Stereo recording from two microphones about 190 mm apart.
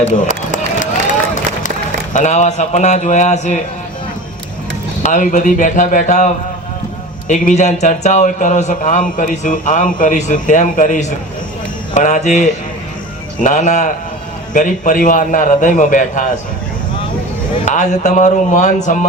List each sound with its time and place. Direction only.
2.1 s a man's voice: 40° left (ahead or behind)
5.0 s a man's voice: 40° left (ahead or behind)
17.7 s a man's voice: 40° left (ahead or behind)